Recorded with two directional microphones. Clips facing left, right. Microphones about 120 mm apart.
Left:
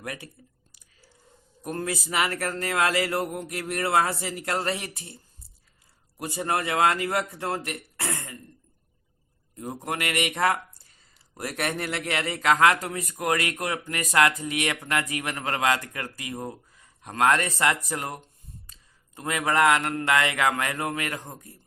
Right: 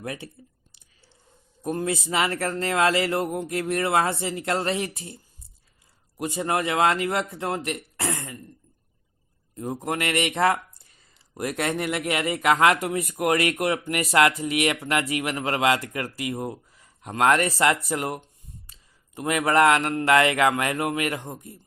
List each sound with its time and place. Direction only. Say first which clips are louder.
0.0 s speech: right 3 dB; 25° right (ahead or behind)
0.7 s whispering: left 2 dB; 25° right (ahead or behind)
1.8 s speech: right 2 dB; 25° right (ahead or behind)
6.1 s speech: right 2 dB; 20° right (ahead or behind)
9.6 s speech: right 3 dB; 25° right (ahead or behind)